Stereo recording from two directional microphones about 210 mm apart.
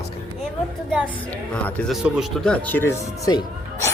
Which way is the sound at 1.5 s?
5° left (ahead or behind).